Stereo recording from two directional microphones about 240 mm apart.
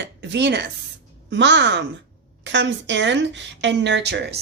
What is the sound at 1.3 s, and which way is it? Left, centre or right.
Speech, right.